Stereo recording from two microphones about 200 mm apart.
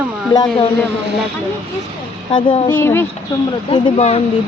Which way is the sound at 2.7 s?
10° left (ahead or behind).